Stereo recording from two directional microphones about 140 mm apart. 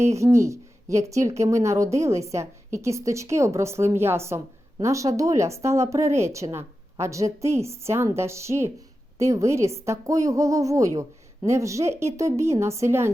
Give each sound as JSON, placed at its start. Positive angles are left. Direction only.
{"t": 0.0, "sound": "a woman's voice", "side_deg": -20}